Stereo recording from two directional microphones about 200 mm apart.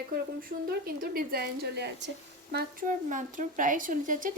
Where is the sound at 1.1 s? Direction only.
50° right (ahead or behind).